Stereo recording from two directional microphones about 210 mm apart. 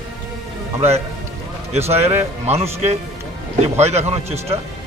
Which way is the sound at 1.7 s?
30° right (ahead or behind).